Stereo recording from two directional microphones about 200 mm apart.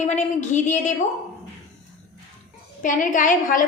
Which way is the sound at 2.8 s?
40° left (ahead or behind).